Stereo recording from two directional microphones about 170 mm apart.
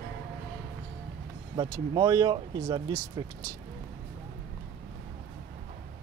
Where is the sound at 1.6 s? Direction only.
20° right (ahead or behind).